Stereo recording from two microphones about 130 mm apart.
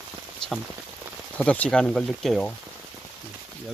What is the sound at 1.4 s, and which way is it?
Speech, 10° left (ahead or behind).